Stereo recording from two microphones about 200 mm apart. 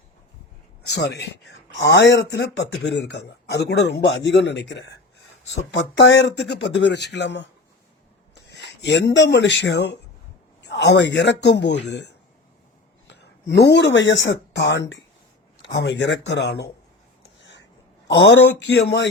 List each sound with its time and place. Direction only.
0.9 s speech: 55° left (ahead or behind)
8.4 s a sound: 60° left (ahead or behind)
9.1 s speech: 65° left (ahead or behind)
13.1 s speech: 60° left (ahead or behind)
17.4 s a sound: 65° left (ahead or behind)
18.1 s speech: 65° left (ahead or behind)